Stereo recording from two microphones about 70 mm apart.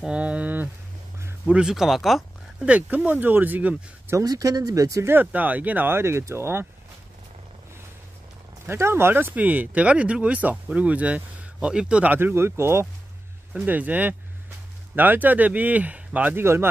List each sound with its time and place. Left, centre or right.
0.0 s speech: centre
1.4 s speech: centre
2.6 s speech: centre
4.2 s speech: right
5.0 s speech: right
8.6 s speech: right; by 12.1 s centre
12.1 s speech: right
13.7 s speech: right
16.3 s speech: right